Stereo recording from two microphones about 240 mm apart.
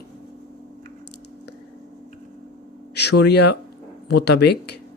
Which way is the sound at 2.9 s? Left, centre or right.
Left.